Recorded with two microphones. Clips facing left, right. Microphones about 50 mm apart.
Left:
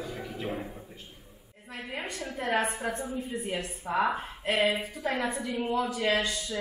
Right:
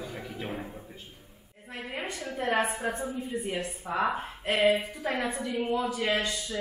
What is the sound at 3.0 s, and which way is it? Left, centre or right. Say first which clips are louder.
A woman's voice: right 1 dB; centre.